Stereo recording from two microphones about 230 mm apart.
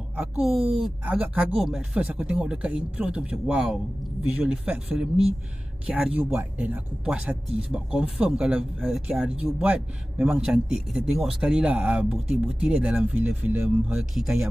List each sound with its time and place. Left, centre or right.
0.1 s speech: centre
0.5 s speech: right
0.7 s speech: centre